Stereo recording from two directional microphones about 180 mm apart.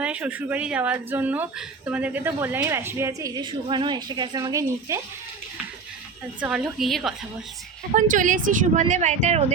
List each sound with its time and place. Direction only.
0.0 s speech: 10° right (ahead or behind)
6.4 s a woman's voice: 5° right (ahead or behind)
7.9 s a woman's voice: 45° right (ahead or behind)